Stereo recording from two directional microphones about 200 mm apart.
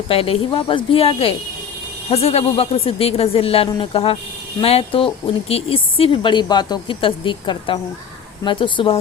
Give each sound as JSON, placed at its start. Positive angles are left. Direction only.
{"t": 0.1, "sound": "speech", "side_deg": 30}